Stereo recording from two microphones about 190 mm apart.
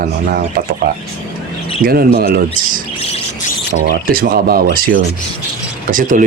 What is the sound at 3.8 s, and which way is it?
Speech, 55° right (ahead or behind).